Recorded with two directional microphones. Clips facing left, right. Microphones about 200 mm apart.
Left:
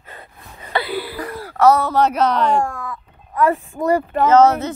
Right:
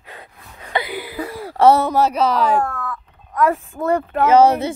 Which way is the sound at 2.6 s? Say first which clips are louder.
Right 1 dB; 15° left (ahead or behind).